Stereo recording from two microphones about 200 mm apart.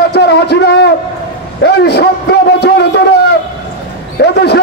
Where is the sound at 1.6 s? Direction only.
55° left (ahead or behind).